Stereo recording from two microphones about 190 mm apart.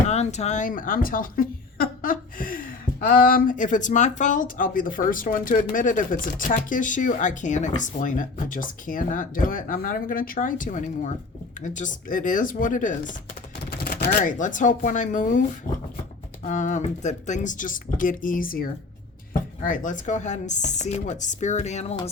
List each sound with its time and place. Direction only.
0.1 s speech: 35° left (ahead or behind)
14.0 s speech: 45° left (ahead or behind)